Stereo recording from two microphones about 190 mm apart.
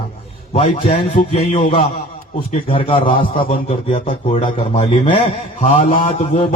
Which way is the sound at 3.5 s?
30° left (ahead or behind).